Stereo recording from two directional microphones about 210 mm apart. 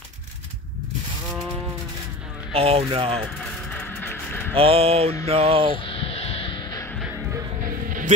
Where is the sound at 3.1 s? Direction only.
5° left (ahead or behind).